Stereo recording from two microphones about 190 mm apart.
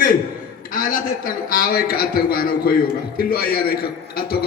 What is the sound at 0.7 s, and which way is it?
A man's voice, 45° left (ahead or behind).